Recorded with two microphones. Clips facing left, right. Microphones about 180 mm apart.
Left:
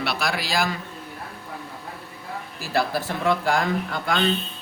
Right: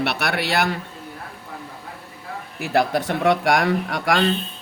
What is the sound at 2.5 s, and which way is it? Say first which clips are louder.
A man's voice: right 4 dB; 65° right (ahead or behind).